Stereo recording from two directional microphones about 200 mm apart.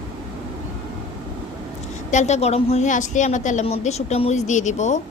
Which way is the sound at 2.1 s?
35° left (ahead or behind).